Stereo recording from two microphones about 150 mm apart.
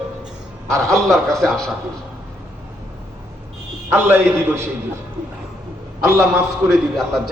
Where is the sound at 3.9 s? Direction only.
15° right (ahead or behind).